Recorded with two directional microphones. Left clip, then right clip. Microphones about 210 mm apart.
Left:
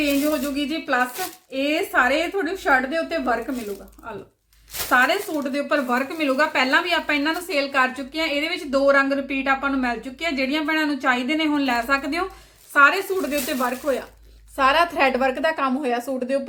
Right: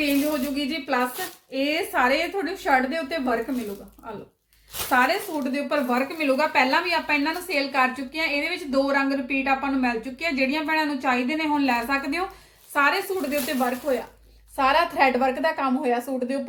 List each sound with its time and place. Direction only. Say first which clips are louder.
0.5 s speech: left 2 dB; 20° left (ahead or behind)
4.9 s speech: left 3 dB; 20° left (ahead or behind)